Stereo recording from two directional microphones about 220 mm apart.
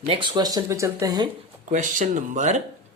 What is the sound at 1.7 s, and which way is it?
Speech, 35° right (ahead or behind).